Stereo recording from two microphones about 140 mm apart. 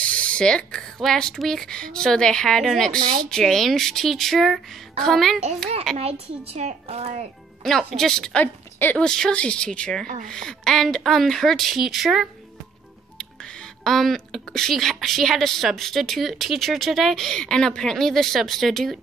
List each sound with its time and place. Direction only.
0.0 s a woman's voice: 10° left (ahead or behind)
5.9 s a child's voice: 50° right (ahead or behind)
7.6 s a woman's voice: centre (ahead or behind)
13.8 s a woman's voice: centre (ahead or behind)